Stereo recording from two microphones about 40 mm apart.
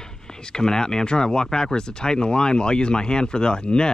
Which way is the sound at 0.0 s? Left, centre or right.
Centre.